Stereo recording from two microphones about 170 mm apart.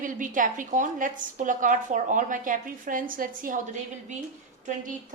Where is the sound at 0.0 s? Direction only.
50° right (ahead or behind).